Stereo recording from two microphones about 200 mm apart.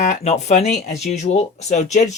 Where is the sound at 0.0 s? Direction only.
35° left (ahead or behind).